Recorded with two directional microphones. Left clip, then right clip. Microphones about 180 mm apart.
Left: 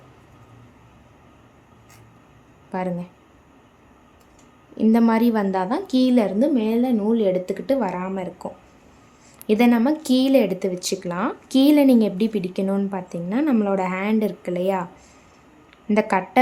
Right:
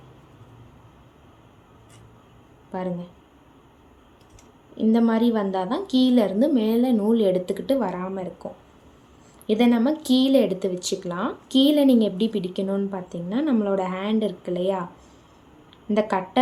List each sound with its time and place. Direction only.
2.7 s speech: 25° left (ahead or behind)
4.8 s speech: 25° left (ahead or behind)
9.5 s speech: 25° left (ahead or behind)
15.9 s speech: 20° left (ahead or behind)